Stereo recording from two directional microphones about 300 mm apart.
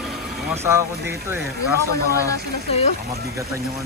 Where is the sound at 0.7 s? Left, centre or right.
Centre.